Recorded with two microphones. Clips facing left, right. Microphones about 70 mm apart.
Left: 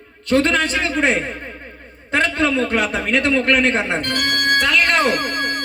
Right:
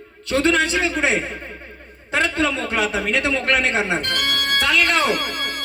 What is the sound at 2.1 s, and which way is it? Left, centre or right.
A man's voice, left.